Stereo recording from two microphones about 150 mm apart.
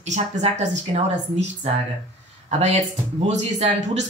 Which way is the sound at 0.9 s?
40° right (ahead or behind).